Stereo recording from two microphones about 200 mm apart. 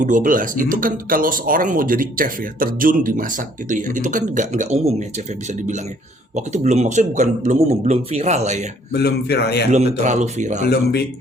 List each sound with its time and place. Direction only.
0.0 s speech: 40° right (ahead or behind)
8.9 s a man's voice: 55° left (ahead or behind)
9.7 s speech: 35° right (ahead or behind)